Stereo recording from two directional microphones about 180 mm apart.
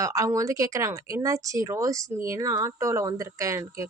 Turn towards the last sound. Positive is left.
turn(degrees=-15)  # may be behind; listen again after turning